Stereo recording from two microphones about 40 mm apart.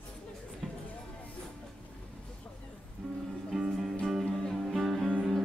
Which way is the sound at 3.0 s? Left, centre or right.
Centre.